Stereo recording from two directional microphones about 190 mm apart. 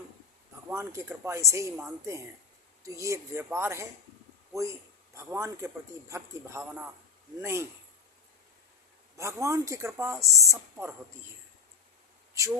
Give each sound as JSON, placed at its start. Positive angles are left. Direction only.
{"t": 0.7, "sound": "a man's voice", "side_deg": -15}
{"t": 9.1, "sound": "a man's voice", "side_deg": -15}